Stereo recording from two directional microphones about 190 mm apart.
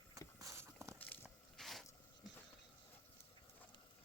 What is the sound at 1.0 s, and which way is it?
Biting, 10° left (ahead or behind).